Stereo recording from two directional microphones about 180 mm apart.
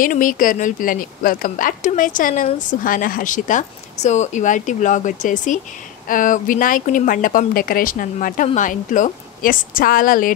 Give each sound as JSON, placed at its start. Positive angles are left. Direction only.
{"t": 0.0, "sound": "a woman's voice", "side_deg": 50}